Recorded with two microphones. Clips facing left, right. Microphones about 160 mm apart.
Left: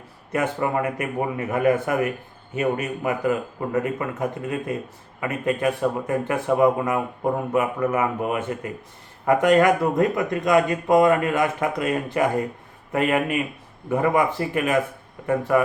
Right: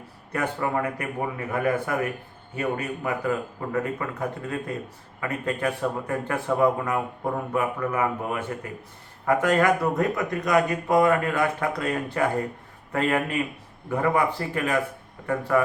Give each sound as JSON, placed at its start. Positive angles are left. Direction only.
{"t": 0.3, "sound": "a man's voice", "side_deg": 20}